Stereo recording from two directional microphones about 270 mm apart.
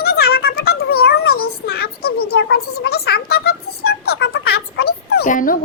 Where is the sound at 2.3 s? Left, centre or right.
Left.